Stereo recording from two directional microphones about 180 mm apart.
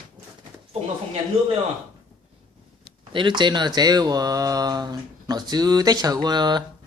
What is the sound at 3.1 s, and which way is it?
Speech, 25° right (ahead or behind).